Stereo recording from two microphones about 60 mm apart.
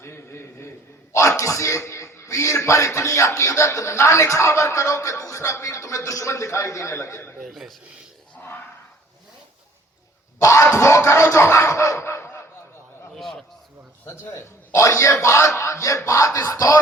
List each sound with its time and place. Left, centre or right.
1.1 s a man's voice: left
7.4 s a man's voice: centre
10.4 s music: left
13.1 s a sound: centre
14.1 s a man's voice: left